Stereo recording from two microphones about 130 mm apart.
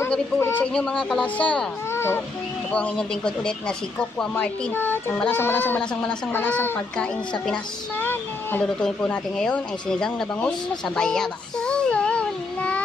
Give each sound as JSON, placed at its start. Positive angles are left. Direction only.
{"t": 0.1, "sound": "speech", "side_deg": 15}
{"t": 1.9, "sound": "a sound", "side_deg": 20}
{"t": 2.7, "sound": "speech", "side_deg": 10}
{"t": 4.7, "sound": "speech", "side_deg": 15}
{"t": 11.0, "sound": "child singing", "side_deg": 5}